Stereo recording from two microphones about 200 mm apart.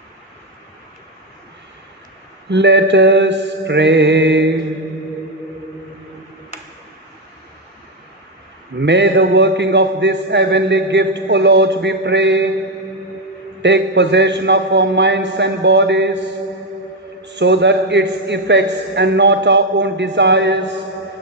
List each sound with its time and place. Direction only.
2.5 s a man's voice: 60° right (ahead or behind)
8.8 s a man's voice: 60° right (ahead or behind)
13.6 s a man's voice: 60° right (ahead or behind)
17.2 s a man's voice: 60° right (ahead or behind)